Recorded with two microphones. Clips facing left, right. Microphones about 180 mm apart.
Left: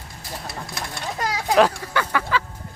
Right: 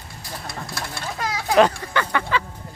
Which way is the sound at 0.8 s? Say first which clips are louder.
Left 1 dB; 20° left (ahead or behind).